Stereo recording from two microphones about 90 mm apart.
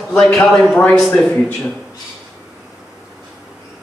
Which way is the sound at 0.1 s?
10° left (ahead or behind).